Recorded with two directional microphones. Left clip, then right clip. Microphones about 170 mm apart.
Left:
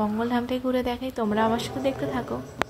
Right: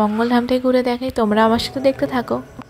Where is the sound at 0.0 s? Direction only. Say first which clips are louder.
Right 9 dB; 40° right (ahead or behind).